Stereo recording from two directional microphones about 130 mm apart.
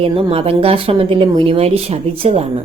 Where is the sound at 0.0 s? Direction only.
45° right (ahead or behind).